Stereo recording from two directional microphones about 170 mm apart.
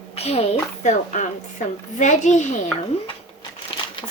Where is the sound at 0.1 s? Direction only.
35° left (ahead or behind).